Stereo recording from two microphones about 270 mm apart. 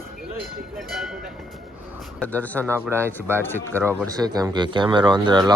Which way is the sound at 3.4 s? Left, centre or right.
Centre.